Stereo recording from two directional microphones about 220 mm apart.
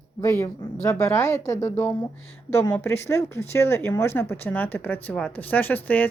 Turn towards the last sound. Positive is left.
turn(degrees=10)  # may be behind; listen again after turning